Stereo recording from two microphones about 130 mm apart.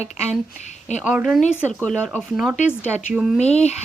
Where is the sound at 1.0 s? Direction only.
5° right (ahead or behind).